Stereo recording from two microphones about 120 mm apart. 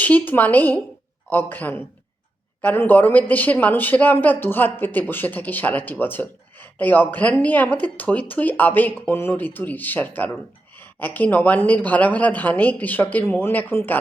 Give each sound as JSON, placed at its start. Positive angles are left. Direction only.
{"t": 0.0, "sound": "speech", "side_deg": 15}